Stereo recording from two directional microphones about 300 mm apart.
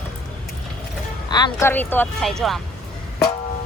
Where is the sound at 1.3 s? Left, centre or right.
Centre.